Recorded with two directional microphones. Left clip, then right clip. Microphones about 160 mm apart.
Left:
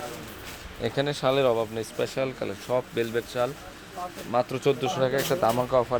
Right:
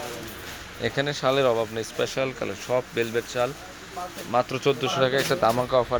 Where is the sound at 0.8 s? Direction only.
10° left (ahead or behind).